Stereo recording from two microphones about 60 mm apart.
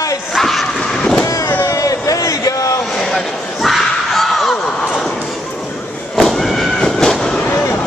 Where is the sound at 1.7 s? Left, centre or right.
Left.